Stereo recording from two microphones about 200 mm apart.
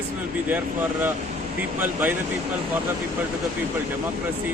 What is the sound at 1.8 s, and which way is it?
Speech, 10° right (ahead or behind).